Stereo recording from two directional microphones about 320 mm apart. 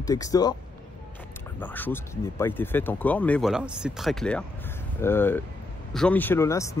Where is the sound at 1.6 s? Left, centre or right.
Centre.